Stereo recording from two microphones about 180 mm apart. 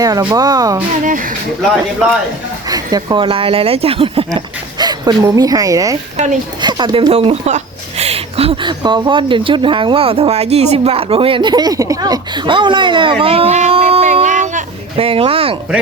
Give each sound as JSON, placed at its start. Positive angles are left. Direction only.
{"t": 0.0, "sound": "speech", "side_deg": -20}
{"t": 1.0, "sound": "speech", "side_deg": -50}
{"t": 2.6, "sound": "speech", "side_deg": -20}
{"t": 6.1, "sound": "speech", "side_deg": -40}
{"t": 6.6, "sound": "speech", "side_deg": -25}